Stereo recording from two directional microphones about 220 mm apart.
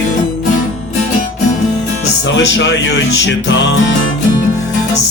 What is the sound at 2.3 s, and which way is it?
Speech, 55° left (ahead or behind).